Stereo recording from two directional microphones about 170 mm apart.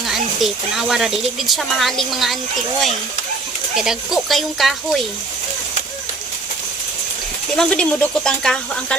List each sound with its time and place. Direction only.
0.1 s speech: centre (ahead or behind)
3.8 s speech: centre (ahead or behind)
7.5 s speech: 5° left (ahead or behind)